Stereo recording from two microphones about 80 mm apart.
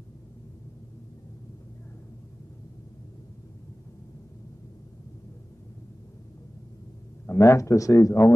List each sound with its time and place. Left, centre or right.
7.2 s speech: left